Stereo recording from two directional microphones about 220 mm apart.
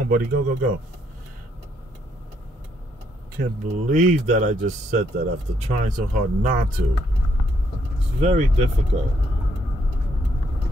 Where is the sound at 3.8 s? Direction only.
35° right (ahead or behind).